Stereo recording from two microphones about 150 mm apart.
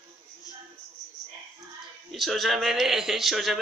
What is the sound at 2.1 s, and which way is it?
A man's voice, centre (ahead or behind).